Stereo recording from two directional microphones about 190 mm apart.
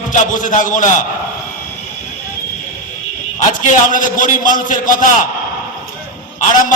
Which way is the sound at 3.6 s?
45° left (ahead or behind).